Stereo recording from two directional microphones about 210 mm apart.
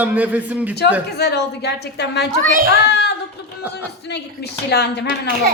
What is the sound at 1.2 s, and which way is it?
A woman's voice, 50° left (ahead or behind).